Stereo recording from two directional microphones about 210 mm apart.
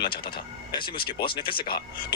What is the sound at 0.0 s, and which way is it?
Speech, 20° left (ahead or behind).